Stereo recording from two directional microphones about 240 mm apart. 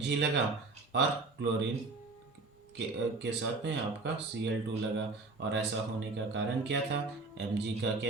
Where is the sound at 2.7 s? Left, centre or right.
Right.